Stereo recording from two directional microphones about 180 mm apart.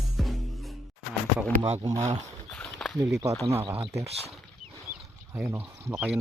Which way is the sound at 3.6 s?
30° right (ahead or behind).